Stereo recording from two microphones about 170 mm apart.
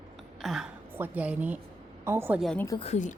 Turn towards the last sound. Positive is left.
turn(degrees=45)  # may be behind; listen again after turning